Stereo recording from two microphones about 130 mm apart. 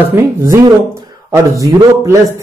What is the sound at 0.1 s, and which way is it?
A man's voice, 20° right (ahead or behind).